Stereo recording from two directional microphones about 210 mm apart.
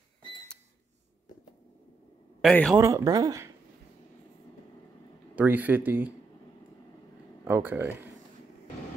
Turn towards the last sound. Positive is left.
turn(degrees=-10)  # may be behind; listen again after turning